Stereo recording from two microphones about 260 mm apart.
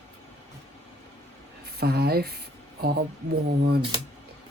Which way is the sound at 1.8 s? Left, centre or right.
Right.